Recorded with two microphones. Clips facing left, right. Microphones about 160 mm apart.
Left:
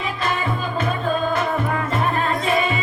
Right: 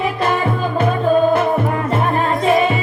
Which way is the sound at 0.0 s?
55° right (ahead or behind).